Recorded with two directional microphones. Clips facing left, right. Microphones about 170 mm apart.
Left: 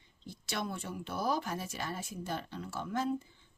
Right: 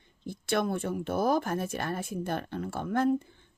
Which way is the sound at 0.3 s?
55° right (ahead or behind).